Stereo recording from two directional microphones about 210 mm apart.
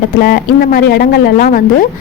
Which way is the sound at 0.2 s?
45° left (ahead or behind).